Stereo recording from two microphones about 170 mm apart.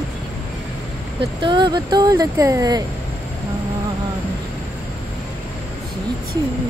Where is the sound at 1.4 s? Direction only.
25° right (ahead or behind).